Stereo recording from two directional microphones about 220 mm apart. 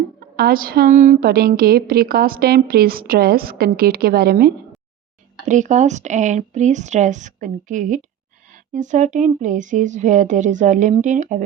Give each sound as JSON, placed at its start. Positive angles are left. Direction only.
{"t": 0.3, "sound": "a woman's voice", "side_deg": -40}
{"t": 5.5, "sound": "speech", "side_deg": -35}